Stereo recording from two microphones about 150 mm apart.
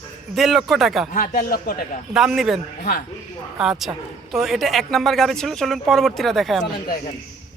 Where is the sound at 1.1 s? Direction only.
65° left (ahead or behind); by 1.7 s 85° left.